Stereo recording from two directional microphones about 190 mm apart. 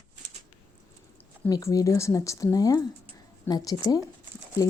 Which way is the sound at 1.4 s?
15° left (ahead or behind).